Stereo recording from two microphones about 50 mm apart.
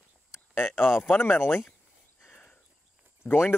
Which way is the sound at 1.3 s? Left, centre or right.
Left.